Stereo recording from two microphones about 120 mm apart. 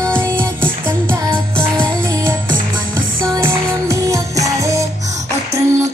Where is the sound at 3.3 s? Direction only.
20° right (ahead or behind).